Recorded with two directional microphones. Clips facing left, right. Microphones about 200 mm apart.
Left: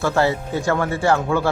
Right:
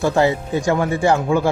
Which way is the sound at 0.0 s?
15° right (ahead or behind).